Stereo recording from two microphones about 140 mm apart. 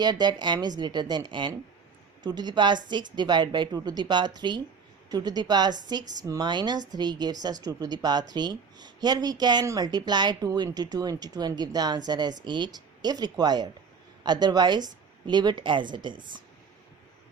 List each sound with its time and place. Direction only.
0.0 s a woman's voice: 30° right (ahead or behind)